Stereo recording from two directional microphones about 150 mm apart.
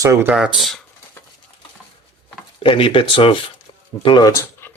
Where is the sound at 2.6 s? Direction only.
35° left (ahead or behind); by 4.7 s 20° left (ahead or behind).